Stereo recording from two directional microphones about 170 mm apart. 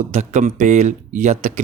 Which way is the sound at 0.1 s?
45° right (ahead or behind).